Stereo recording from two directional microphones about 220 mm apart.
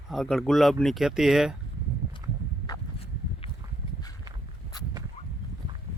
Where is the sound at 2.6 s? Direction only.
20° left (ahead or behind).